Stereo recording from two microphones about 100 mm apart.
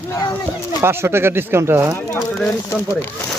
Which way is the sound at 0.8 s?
25° right (ahead or behind).